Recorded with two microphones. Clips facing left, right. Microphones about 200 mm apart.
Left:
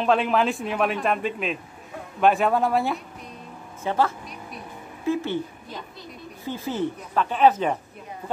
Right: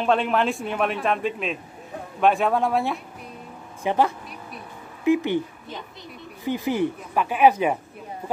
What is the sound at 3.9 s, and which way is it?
A woman's voice, 15° right (ahead or behind).